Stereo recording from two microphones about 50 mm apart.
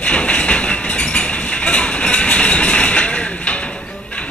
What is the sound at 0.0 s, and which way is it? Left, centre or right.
Train, left.